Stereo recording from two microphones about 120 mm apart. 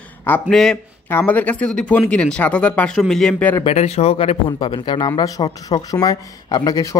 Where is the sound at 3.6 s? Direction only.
60° left (ahead or behind); by 6.9 s 30° left (ahead or behind).